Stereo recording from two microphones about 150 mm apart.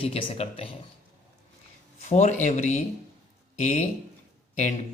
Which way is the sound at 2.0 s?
50° left (ahead or behind).